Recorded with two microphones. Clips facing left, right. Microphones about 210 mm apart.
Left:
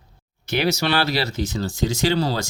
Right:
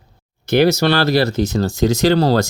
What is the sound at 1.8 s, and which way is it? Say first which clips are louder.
Speech: right 7 dB; 65° right (ahead or behind).